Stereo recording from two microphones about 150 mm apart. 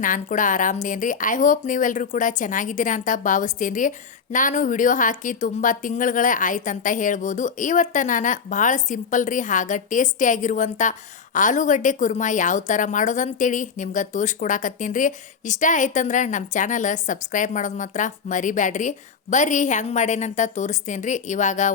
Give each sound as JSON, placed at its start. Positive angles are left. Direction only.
{"t": 0.0, "sound": "a woman's voice", "side_deg": 60}